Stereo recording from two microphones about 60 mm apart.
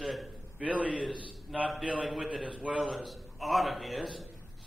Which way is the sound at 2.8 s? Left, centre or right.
Centre.